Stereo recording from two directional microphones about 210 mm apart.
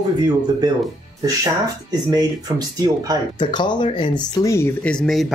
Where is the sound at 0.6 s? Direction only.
20° right (ahead or behind).